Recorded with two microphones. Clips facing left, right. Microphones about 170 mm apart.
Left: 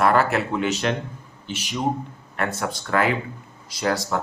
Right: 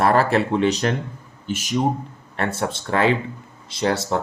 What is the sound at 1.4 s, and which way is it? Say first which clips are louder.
Speech: right 6 dB; 45° right (ahead or behind).